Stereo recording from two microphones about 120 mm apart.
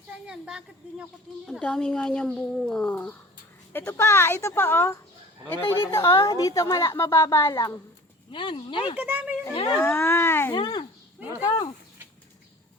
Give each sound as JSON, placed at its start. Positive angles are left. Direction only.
{"t": 0.3, "sound": "speech", "side_deg": -5}
{"t": 1.5, "sound": "a woman's voice", "side_deg": 5}
{"t": 8.3, "sound": "speech", "side_deg": 45}
{"t": 9.0, "sound": "speech", "side_deg": -15}
{"t": 9.8, "sound": "a woman's voice", "side_deg": 20}
{"t": 10.5, "sound": "speech", "side_deg": 40}